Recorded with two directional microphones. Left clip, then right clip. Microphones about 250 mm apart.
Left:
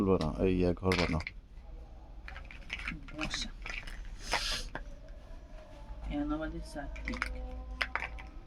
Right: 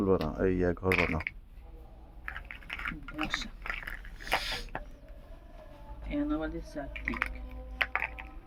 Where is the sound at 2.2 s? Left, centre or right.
Centre.